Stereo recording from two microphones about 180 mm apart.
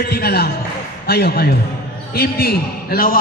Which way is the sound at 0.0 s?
60° left (ahead or behind).